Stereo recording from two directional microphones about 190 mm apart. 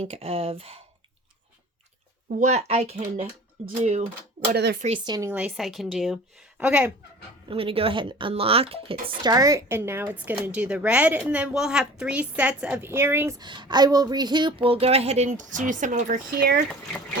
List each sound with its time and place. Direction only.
0.0 s speech: 30° right (ahead or behind)
2.4 s speech: 35° right (ahead or behind)
4.4 s speech: 55° right (ahead or behind)
5.0 s a woman's voice: 20° right (ahead or behind)
5.3 s speech: 5° right (ahead or behind)
7.4 s speech: 30° right (ahead or behind); by 13.3 s 10° right (ahead or behind)
13.4 s speech: 25° right (ahead or behind); by 16.6 s 55° right (ahead or behind)